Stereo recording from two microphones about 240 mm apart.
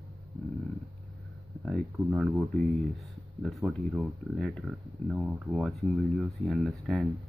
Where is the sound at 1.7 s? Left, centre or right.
Centre.